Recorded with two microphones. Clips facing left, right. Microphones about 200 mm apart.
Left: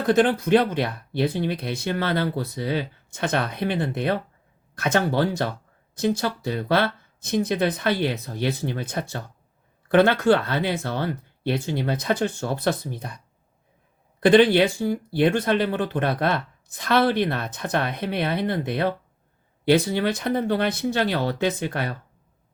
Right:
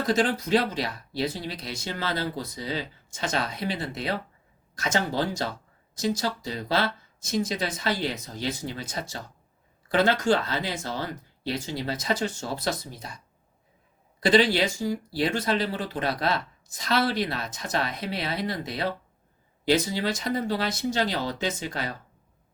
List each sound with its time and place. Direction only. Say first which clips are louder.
0.0 s speech: left 5 dB; 60° left (ahead or behind)